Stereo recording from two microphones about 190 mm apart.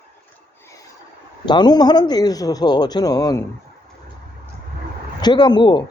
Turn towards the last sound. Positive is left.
turn(degrees=25)  # may be behind; listen again after turning